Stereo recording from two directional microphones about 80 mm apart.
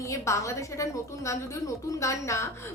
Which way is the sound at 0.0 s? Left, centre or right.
Left.